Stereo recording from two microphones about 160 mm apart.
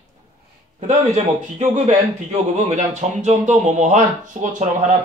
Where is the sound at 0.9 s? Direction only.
45° right (ahead or behind).